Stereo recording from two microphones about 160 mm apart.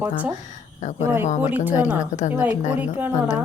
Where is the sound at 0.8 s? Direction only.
50° left (ahead or behind).